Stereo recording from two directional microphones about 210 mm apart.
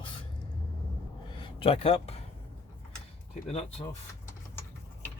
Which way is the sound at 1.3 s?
25° left (ahead or behind).